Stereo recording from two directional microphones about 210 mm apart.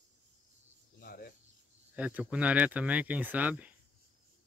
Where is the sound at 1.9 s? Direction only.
5° right (ahead or behind).